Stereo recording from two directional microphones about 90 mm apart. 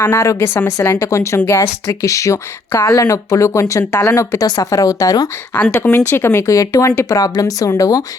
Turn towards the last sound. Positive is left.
turn(degrees=40)  # may be behind; listen again after turning